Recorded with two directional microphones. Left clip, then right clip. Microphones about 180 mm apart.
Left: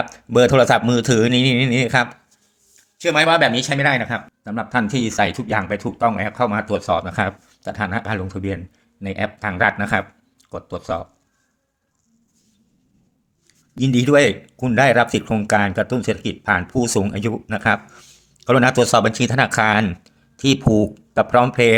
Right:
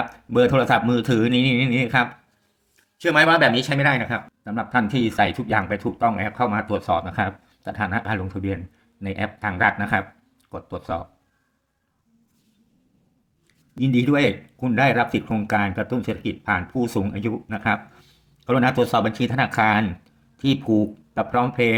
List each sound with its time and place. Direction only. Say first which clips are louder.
0.0 s speech: left 4 dB; 30° left (ahead or behind)
3.0 s speech: left 1 dB; 5° left (ahead or behind)
13.7 s speech: left 6 dB; 30° left (ahead or behind)